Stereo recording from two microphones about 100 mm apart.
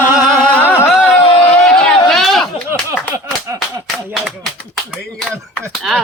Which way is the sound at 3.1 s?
30° right (ahead or behind).